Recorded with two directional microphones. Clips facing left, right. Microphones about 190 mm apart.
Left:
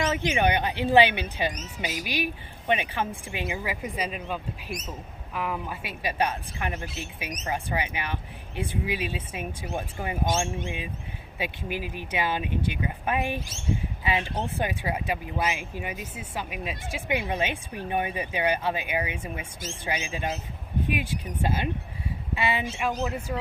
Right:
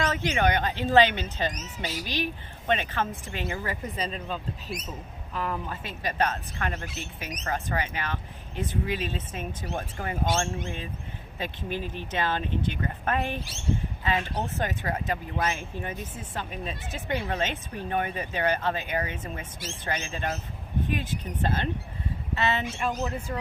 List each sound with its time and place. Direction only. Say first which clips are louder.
0.0 s speech: left 1 dB; 15° left (ahead or behind)